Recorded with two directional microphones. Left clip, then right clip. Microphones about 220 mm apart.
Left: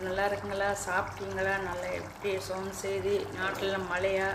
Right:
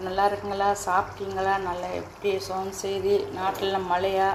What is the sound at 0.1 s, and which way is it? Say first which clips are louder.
A woman's voice: right 7 dB; 10° right (ahead or behind).